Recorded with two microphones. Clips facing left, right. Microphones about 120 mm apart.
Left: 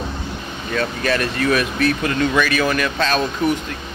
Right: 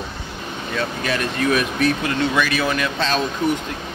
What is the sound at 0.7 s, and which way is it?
Speech, 20° right (ahead or behind).